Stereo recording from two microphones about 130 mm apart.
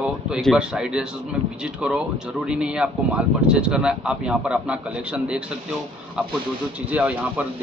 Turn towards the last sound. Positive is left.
turn(degrees=-10)  # may be behind; listen again after turning